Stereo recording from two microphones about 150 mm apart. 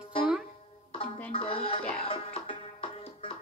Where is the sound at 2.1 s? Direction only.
35° left (ahead or behind).